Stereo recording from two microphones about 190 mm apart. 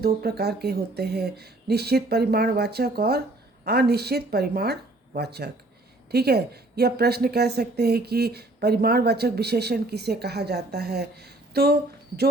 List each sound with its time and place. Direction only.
0.0 s a woman's voice: 55° right (ahead or behind)